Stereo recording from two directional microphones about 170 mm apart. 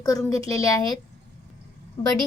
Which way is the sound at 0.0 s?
20° left (ahead or behind).